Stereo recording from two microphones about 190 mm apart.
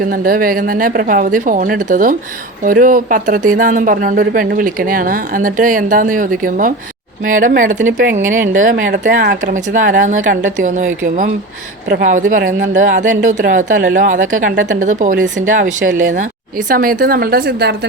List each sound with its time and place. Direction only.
0.0 s speech: 50° right (ahead or behind)
9.4 s speech: 40° right (ahead or behind)